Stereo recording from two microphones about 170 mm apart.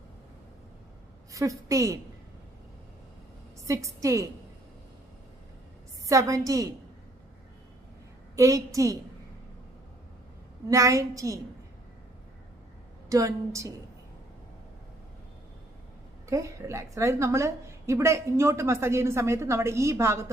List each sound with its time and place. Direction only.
1.3 s a woman's voice: 20° right (ahead or behind)
3.7 s a woman's voice: 20° right (ahead or behind)
6.1 s a woman's voice: 20° right (ahead or behind)
8.4 s a woman's voice: 20° right (ahead or behind)
10.7 s a woman's voice: 20° right (ahead or behind)
13.1 s a woman's voice: 20° right (ahead or behind)
16.3 s a woman's voice: 20° right (ahead or behind)